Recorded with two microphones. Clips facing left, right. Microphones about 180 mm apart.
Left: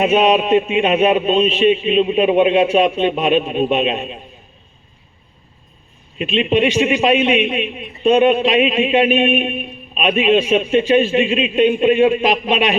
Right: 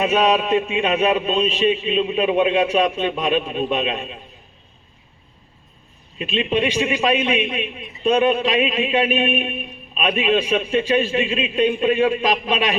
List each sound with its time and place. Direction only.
0.0 s a man's voice: 25° left (ahead or behind)
6.1 s a man's voice: 25° left (ahead or behind)